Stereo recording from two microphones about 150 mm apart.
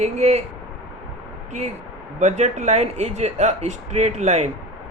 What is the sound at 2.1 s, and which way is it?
A man's voice, 50° right (ahead or behind).